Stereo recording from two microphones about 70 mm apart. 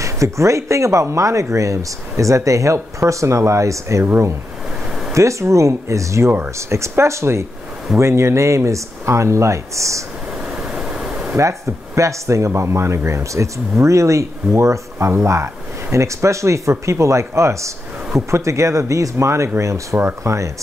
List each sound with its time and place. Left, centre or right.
0.0 s speech: right
4.8 s a sound: centre
5.1 s speech: right
10.3 s vehicle: centre
11.3 s speech: right